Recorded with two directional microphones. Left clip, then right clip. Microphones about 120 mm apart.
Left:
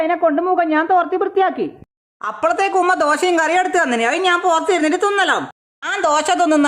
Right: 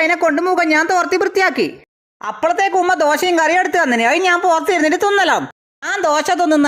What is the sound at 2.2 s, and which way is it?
Speech, 15° right (ahead or behind).